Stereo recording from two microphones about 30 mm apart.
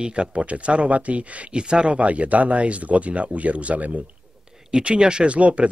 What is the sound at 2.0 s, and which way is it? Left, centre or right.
Speech, right.